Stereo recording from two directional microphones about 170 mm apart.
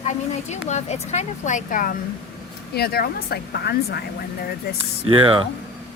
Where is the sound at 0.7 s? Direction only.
40° left (ahead or behind).